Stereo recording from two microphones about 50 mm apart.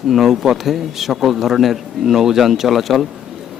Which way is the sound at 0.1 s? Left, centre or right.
Centre.